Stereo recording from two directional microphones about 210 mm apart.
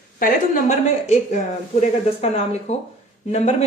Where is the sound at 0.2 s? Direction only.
40° left (ahead or behind).